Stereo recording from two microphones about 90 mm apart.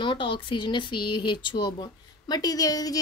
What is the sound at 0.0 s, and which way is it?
Speech, 65° left (ahead or behind).